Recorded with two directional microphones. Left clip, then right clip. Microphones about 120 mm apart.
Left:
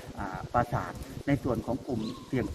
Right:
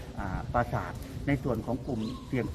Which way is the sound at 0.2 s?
10° left (ahead or behind).